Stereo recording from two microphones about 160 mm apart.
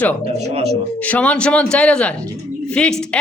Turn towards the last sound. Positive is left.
turn(degrees=5)  # may be behind; listen again after turning